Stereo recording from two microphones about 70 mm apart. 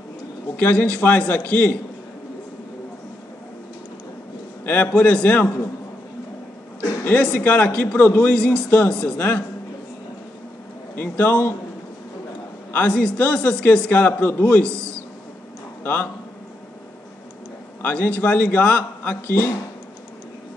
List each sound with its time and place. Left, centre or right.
0.6 s a man's voice: left
4.6 s a man's voice: left
7.1 s a man's voice: centre
8.3 s a man's voice: centre
11.0 s a man's voice: left
12.7 s a man's voice: centre
15.8 s a man's voice: left
17.8 s a man's voice: left